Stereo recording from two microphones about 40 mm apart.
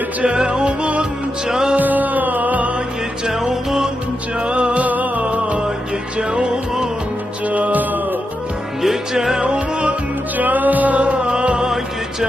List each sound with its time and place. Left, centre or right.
0.2 s music: right
1.5 s music: centre
1.7 s music: right
3.2 s music: centre
4.4 s music: right
5.2 s music: right
6.1 s music: right
7.4 s music: right
8.8 s music: centre; by 9.9 s right
10.3 s music: right